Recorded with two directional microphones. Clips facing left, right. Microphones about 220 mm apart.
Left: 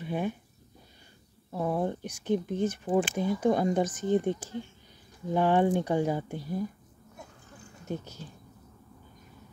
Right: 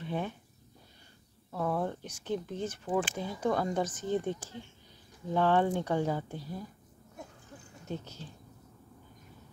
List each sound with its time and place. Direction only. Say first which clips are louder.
0.0 s speech: left 4 dB; 10° left (ahead or behind)
1.5 s speech: left 3 dB; 15° left (ahead or behind)
7.9 s speech: left 3 dB; 15° left (ahead or behind)